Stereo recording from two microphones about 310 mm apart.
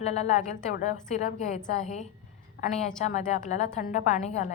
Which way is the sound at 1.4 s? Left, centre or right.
Left.